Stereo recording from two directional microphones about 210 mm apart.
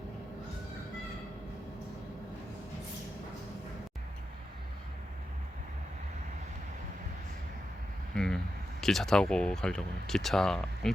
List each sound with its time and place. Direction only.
8.1 s speech: 5° left (ahead or behind)